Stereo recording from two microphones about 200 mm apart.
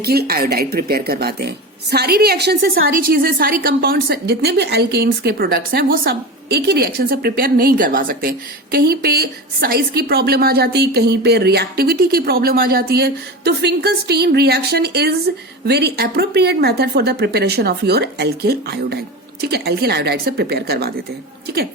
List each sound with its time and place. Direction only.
0.0 s a woman's voice: 50° right (ahead or behind)